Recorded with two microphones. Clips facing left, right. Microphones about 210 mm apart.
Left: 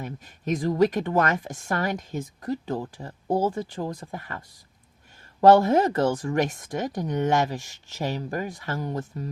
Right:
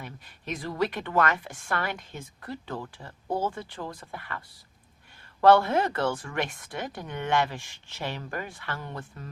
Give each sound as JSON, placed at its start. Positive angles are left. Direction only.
{"t": 0.0, "sound": "speech", "side_deg": 40}
{"t": 9.0, "sound": "speech", "side_deg": 20}